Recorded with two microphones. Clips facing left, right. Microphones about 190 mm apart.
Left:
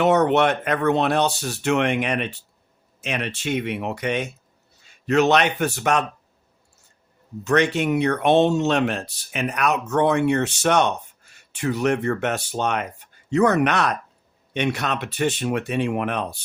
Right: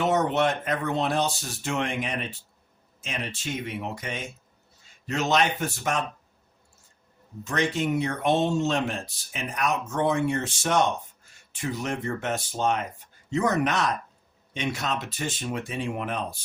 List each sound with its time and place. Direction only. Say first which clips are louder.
0.0 s speech: left 6 dB; 70° left (ahead or behind)
7.4 s speech: left 6 dB; 70° left (ahead or behind)